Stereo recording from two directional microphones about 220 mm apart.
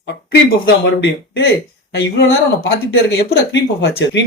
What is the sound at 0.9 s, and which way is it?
Speech, 50° left (ahead or behind).